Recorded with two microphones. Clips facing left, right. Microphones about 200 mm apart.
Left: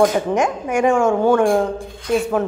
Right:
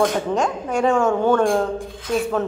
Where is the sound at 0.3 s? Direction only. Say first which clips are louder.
Left 2 dB; 15° left (ahead or behind).